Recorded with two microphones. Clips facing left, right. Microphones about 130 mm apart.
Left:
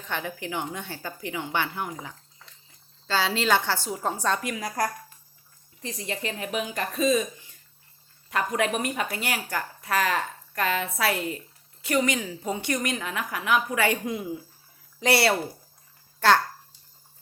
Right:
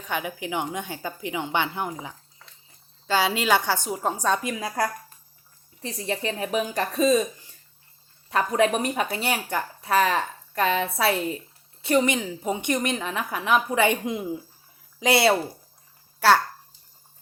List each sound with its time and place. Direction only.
0.0 s a woman's voice: 15° right (ahead or behind)
4.4 s a woman's voice: 25° right (ahead or behind)
5.8 s a woman's voice: 30° right (ahead or behind)
16.2 s a woman's voice: 10° right (ahead or behind)